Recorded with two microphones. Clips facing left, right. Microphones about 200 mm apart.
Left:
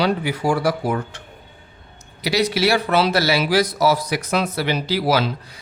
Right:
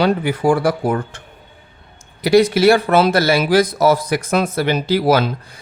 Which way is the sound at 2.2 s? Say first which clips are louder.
Right 7 dB; 50° right (ahead or behind).